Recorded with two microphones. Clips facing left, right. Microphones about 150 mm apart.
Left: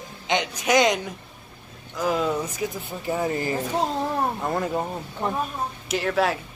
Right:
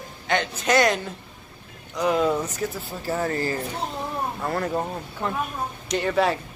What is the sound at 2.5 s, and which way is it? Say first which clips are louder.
Speech: even; 15° left (ahead or behind).